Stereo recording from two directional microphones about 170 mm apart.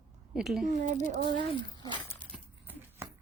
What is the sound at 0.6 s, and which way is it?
Speech, 50° right (ahead or behind).